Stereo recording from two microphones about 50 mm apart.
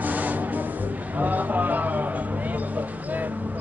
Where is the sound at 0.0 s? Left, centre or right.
Right.